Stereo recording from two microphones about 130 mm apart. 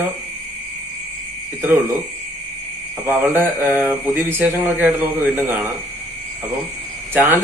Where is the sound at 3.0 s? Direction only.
15° right (ahead or behind).